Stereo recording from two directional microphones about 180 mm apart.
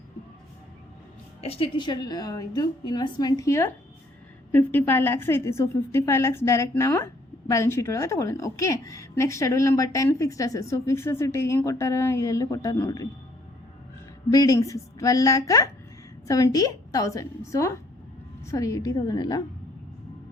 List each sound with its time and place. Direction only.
1.4 s a woman's voice: 30° left (ahead or behind)
14.3 s a woman's voice: 20° left (ahead or behind)